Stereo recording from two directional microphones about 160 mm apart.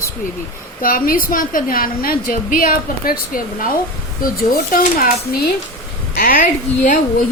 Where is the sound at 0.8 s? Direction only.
60° left (ahead or behind).